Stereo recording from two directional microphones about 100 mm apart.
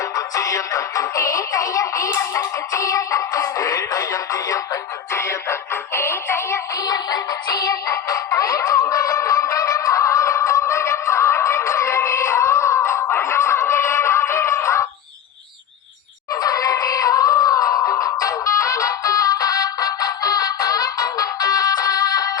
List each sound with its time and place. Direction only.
0.0 s music: 35° left (ahead or behind)
6.8 s music: 40° left (ahead or behind)
16.3 s music: 35° left (ahead or behind)